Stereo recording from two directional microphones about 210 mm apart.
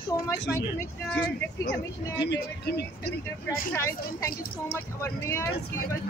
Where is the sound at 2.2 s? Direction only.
50° left (ahead or behind).